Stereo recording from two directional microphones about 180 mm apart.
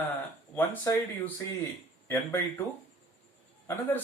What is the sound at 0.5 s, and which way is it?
Speech, 10° left (ahead or behind).